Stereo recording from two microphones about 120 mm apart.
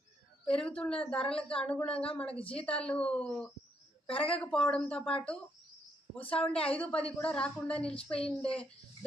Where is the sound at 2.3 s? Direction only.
50° left (ahead or behind).